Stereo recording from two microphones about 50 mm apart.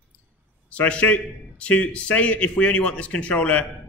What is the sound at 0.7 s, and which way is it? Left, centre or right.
A man's voice, left.